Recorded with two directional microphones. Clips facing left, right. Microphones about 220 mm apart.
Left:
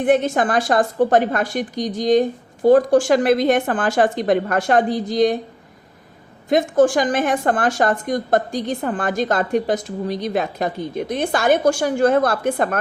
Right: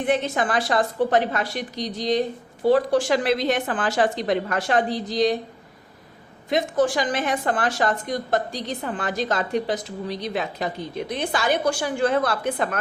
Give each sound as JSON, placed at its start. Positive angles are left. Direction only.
{"t": 0.0, "sound": "a woman's voice", "side_deg": 50}
{"t": 6.5, "sound": "a woman's voice", "side_deg": 50}